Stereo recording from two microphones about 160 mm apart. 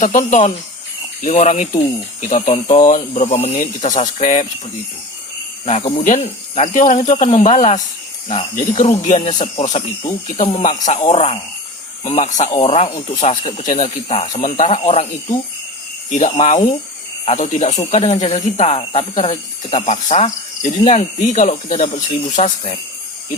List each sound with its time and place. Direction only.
0.0 s cricket: 55° left (ahead or behind)
5.6 s cricket: 45° left (ahead or behind)
6.8 s cricket: 50° left (ahead or behind)
8.3 s speech: 40° left (ahead or behind)
10.4 s cricket: 40° left (ahead or behind)
10.9 s speech: 40° left (ahead or behind)
12.0 s cricket: 45° left (ahead or behind)
13.8 s speech: 40° left (ahead or behind)
14.4 s cricket: 50° left (ahead or behind)
16.0 s speech: 50° left (ahead or behind)
16.3 s cricket: 45° left (ahead or behind)
18.5 s speech: 40° left (ahead or behind)
19.2 s cricket: 40° left (ahead or behind)
22.4 s speech: 40° left (ahead or behind)